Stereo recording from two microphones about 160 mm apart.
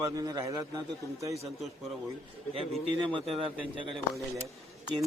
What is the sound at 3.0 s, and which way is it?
Speech, 35° right (ahead or behind).